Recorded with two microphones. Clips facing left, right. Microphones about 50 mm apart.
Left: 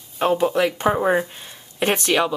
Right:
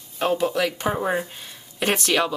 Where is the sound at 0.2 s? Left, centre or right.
Left.